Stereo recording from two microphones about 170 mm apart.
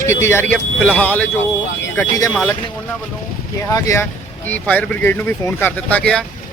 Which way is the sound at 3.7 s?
20° left (ahead or behind).